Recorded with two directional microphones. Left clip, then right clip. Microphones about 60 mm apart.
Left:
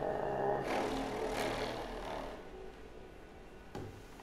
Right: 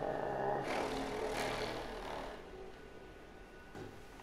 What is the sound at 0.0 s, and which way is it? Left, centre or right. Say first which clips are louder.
Vehicle: left 2 dB; centre.